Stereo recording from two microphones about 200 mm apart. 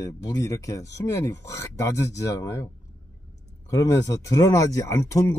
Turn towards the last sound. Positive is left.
turn(degrees=15)  # may be behind; listen again after turning